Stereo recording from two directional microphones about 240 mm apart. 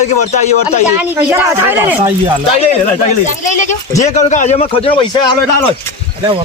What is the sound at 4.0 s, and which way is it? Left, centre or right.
A man's voice, left.